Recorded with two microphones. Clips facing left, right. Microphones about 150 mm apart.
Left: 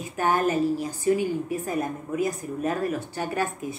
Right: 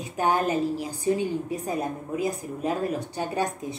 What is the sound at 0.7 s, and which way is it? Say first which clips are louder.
A woman's voice: left 2 dB; 10° right (ahead or behind).